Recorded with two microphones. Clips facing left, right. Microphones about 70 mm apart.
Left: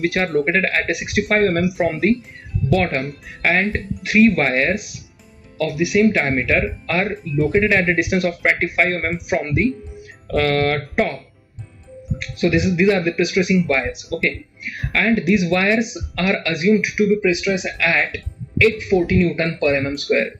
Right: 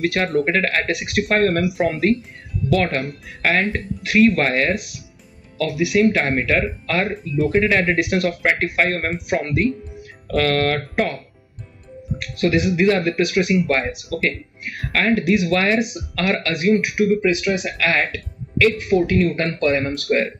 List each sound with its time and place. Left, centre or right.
0.0 s speech: centre